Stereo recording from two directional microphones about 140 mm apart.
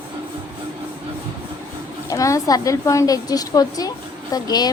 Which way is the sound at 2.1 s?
25° left (ahead or behind).